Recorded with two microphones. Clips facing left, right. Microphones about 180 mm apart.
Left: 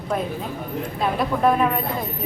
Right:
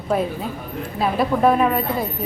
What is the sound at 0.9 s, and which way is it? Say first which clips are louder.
Speech: right 4 dB; 5° right (ahead or behind).